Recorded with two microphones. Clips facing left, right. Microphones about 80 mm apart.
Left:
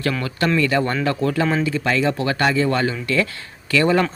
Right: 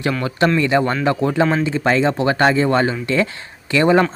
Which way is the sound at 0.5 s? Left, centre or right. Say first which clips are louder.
Right 2 dB; right.